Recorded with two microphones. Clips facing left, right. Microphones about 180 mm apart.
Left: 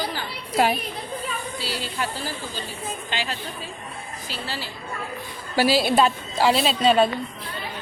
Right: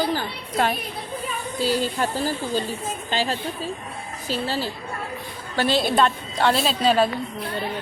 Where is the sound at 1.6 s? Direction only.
50° right (ahead or behind).